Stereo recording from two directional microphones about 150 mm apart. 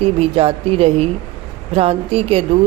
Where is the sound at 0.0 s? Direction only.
40° right (ahead or behind).